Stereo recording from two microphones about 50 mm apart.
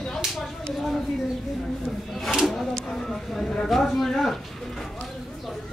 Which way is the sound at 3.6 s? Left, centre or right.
Centre.